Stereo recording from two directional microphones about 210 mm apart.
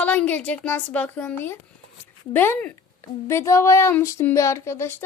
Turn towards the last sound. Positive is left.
turn(degrees=10)  # may be behind; listen again after turning